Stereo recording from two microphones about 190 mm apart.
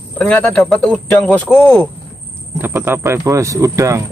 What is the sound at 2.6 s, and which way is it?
Speech, 10° right (ahead or behind).